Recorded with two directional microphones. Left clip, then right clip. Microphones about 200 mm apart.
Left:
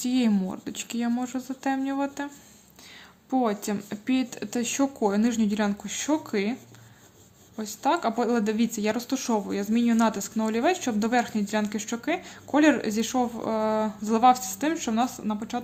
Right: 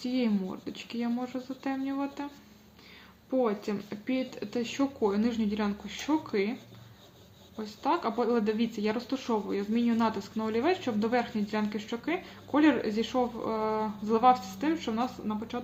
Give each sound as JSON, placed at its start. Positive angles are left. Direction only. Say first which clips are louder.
{"t": 0.0, "sound": "speech", "louder": "left 5 dB", "side_deg": 50}